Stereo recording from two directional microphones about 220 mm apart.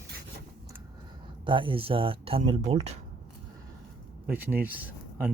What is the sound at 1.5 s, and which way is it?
Speech, 20° right (ahead or behind).